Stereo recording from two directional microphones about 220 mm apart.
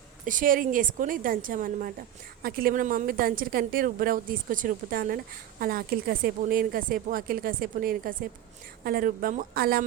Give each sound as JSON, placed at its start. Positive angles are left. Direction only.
{"t": 0.3, "sound": "a woman's voice", "side_deg": -40}